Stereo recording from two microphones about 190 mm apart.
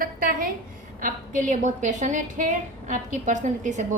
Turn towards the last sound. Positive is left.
turn(degrees=-40)  # may be behind; listen again after turning